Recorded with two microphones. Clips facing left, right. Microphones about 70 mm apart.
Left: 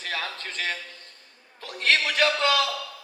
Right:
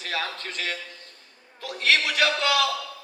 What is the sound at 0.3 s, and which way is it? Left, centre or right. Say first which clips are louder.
Speech: left 1 dB; left.